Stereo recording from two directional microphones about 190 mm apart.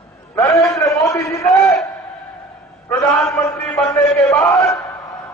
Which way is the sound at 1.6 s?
Centre (ahead or behind).